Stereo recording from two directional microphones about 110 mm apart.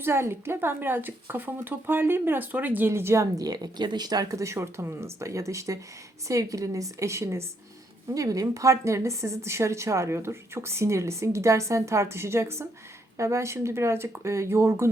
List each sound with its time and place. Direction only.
0.0 s speech: 20° right (ahead or behind)